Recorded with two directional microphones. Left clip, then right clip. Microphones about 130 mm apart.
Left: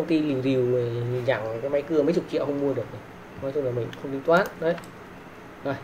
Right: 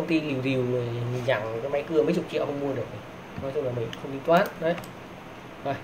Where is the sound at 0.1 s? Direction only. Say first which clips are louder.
Left 2 dB; 20° left (ahead or behind).